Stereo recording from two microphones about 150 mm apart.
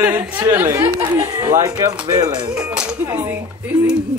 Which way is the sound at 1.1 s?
25° right (ahead or behind).